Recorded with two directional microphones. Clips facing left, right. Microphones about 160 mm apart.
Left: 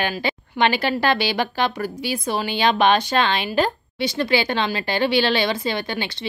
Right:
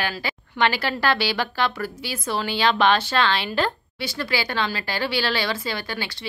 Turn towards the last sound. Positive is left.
turn(degrees=20)  # may be behind; listen again after turning